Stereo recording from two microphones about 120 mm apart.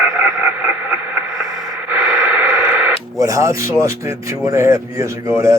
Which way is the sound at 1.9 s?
10° right (ahead or behind).